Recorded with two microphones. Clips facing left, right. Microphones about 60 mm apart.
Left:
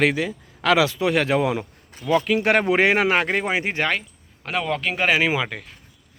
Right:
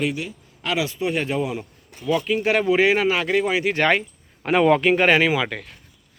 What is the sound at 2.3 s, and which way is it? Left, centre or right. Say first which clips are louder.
Speech: right 1 dB; left.